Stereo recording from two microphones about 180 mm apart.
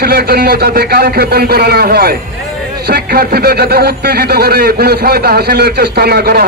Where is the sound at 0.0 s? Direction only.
60° right (ahead or behind).